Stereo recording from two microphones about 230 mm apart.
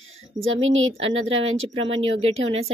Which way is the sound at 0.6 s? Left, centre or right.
Right.